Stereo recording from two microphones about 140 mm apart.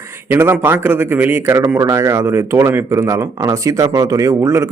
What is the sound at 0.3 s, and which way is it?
A man's voice, 15° right (ahead or behind).